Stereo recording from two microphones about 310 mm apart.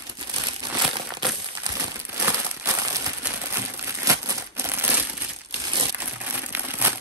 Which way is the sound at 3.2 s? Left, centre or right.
Centre.